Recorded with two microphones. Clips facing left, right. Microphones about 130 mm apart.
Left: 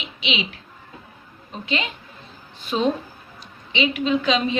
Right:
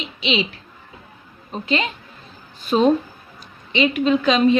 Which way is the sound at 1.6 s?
40° right (ahead or behind).